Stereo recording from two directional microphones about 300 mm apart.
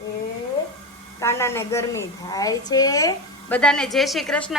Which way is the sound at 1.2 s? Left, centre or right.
Centre.